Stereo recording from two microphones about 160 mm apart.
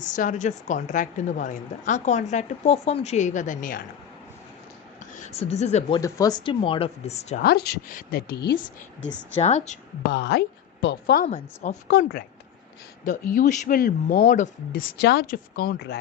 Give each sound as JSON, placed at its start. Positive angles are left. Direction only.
{"t": 0.0, "sound": "a woman's voice", "side_deg": 50}
{"t": 5.1, "sound": "speech", "side_deg": 45}
{"t": 6.0, "sound": "speech", "side_deg": 20}
{"t": 7.4, "sound": "a woman's voice", "side_deg": 80}
{"t": 9.4, "sound": "a woman's voice", "side_deg": 45}
{"t": 10.1, "sound": "a woman's voice", "side_deg": 90}
{"t": 11.3, "sound": "a woman's voice", "side_deg": 45}
{"t": 11.9, "sound": "a woman's voice", "side_deg": 75}
{"t": 13.1, "sound": "speech", "side_deg": 55}